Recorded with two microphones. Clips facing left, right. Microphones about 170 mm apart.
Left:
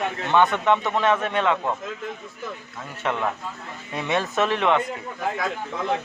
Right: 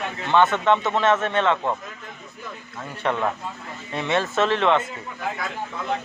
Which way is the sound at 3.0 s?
Centre (ahead or behind).